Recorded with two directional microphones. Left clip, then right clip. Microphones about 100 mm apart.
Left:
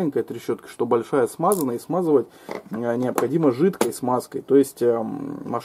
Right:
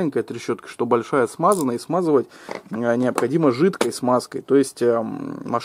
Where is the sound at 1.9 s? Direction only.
25° right (ahead or behind).